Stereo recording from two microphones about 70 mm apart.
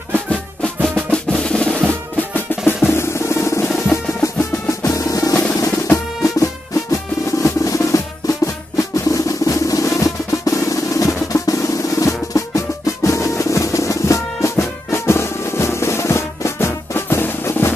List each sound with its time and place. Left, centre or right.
0.1 s music: centre
0.8 s drum: centre
2.9 s drum: left
3.9 s music: left
5.5 s music: left
7.4 s drum: left
12.0 s music: left